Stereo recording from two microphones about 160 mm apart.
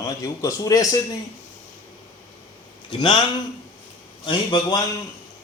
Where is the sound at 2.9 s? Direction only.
30° left (ahead or behind).